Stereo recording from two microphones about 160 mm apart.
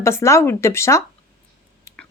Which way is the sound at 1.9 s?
15° left (ahead or behind).